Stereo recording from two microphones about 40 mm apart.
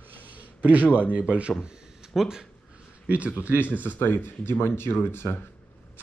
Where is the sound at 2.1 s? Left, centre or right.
Centre.